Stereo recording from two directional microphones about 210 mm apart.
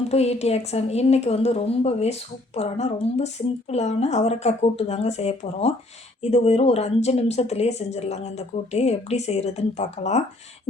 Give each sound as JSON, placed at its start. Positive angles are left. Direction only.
{"t": 0.1, "sound": "a woman's voice", "side_deg": 30}